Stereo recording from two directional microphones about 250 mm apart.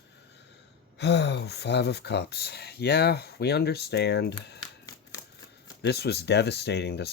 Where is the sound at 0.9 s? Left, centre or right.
Left.